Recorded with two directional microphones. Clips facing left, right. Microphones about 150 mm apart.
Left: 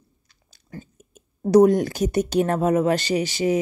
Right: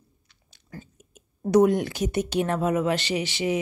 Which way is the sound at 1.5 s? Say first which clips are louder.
Left 4 dB; 40° left (ahead or behind).